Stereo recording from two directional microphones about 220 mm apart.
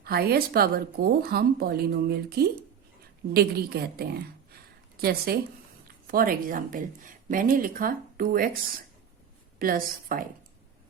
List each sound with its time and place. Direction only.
0.0 s speech: 45° right (ahead or behind)
9.6 s a woman's voice: 40° right (ahead or behind)